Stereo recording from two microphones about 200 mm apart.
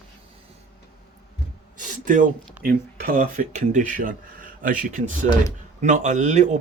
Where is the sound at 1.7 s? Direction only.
40° right (ahead or behind).